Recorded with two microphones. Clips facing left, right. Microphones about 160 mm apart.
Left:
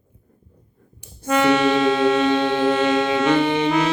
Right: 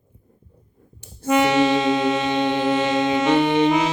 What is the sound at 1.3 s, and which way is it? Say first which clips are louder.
Music: even; 15° right (ahead or behind).